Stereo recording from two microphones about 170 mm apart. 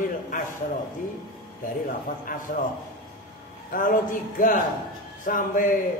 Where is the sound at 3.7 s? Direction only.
50° left (ahead or behind).